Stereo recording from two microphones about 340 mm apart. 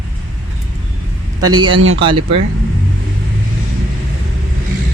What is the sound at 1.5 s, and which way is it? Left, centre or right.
Speech, centre.